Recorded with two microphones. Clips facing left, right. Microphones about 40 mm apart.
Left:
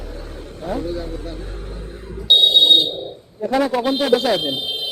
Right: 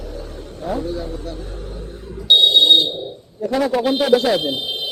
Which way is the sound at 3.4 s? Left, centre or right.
Centre.